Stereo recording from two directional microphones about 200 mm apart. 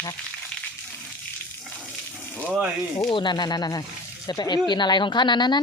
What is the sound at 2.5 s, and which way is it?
Speech, 5° right (ahead or behind).